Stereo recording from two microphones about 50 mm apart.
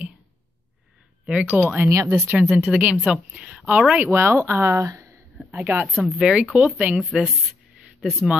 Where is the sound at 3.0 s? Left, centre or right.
Right.